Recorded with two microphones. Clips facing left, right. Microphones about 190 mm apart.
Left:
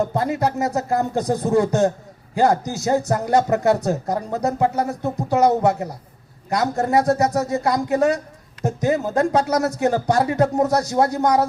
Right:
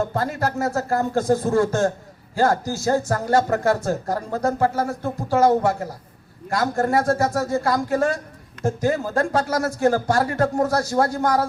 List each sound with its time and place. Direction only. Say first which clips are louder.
0.0 s a man's voice: left 3 dB; 15° left (ahead or behind)